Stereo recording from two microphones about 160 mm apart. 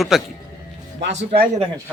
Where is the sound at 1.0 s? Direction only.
90° right.